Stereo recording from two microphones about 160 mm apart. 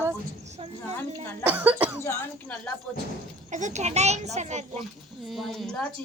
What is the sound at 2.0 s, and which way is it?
Speech, 15° left (ahead or behind).